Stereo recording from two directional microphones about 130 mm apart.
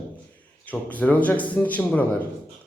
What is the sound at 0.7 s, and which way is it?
A man's voice, 10° left (ahead or behind).